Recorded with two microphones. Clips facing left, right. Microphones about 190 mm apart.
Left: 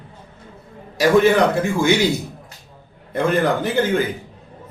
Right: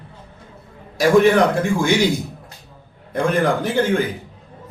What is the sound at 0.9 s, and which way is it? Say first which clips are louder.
Speech: right 1 dB; centre (ahead or behind).